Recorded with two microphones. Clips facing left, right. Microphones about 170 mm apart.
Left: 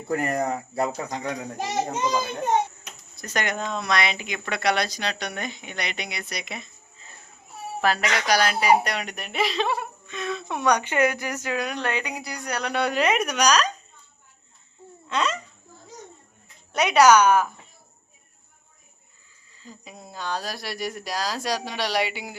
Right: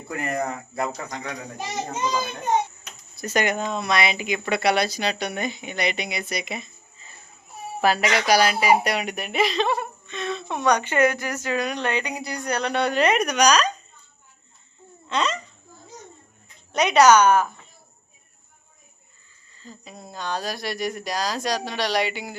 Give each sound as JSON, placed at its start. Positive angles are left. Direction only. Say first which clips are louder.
{"t": 0.1, "sound": "speech", "louder": "left 3 dB", "side_deg": 40}
{"t": 3.2, "sound": "speech", "louder": "right 4 dB", "side_deg": -10}
{"t": 7.8, "sound": "a woman's voice", "louder": "right 3 dB", "side_deg": -5}
{"t": 15.1, "sound": "speech", "louder": "right 1 dB", "side_deg": 5}
{"t": 16.7, "sound": "a woman's voice", "louder": "right 1 dB", "side_deg": 5}
{"t": 19.5, "sound": "speech", "louder": "right 1 dB", "side_deg": 10}